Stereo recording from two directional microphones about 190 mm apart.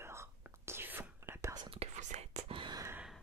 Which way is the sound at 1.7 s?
35° right (ahead or behind).